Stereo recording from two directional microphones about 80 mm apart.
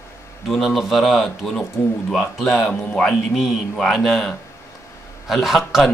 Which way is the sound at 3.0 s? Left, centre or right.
Centre.